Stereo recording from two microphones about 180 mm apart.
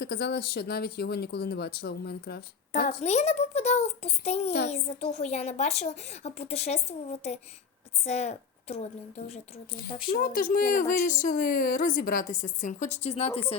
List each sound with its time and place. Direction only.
0.0 s speech: 65° left (ahead or behind)
2.8 s a woman's voice: 40° left (ahead or behind)
10.1 s a woman's voice: 55° left (ahead or behind); by 13.6 s 35° left (ahead or behind)